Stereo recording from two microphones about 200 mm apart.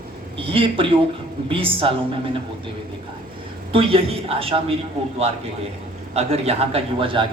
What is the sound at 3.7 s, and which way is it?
A man's voice, 25° right (ahead or behind).